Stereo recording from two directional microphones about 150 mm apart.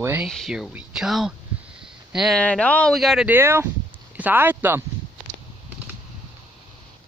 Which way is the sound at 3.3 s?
15° right (ahead or behind).